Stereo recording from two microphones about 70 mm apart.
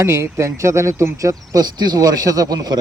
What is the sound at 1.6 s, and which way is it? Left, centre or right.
Speech, right.